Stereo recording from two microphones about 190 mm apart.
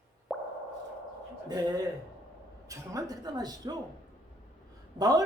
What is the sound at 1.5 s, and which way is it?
Speech, 20° right (ahead or behind).